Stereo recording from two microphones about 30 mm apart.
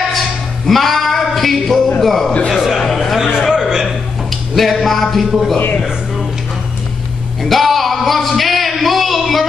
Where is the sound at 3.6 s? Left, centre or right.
Right.